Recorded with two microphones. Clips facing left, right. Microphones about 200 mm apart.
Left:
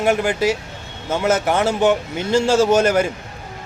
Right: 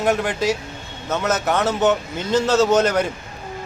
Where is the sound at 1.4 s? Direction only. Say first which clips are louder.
Right 1 dB; 10° left (ahead or behind).